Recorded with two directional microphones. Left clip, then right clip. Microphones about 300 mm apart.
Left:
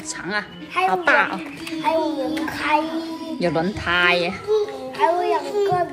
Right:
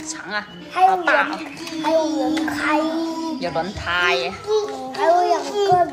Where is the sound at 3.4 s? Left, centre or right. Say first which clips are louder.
Left 2 dB; left.